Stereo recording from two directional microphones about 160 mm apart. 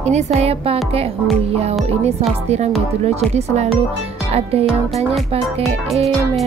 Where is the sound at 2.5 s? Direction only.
45° right (ahead or behind).